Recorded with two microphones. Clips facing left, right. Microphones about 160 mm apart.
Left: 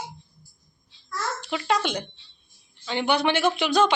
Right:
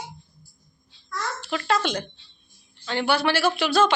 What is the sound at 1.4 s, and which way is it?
A child's voice, 15° left (ahead or behind).